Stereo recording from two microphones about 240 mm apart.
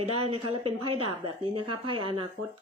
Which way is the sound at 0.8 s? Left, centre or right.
Right.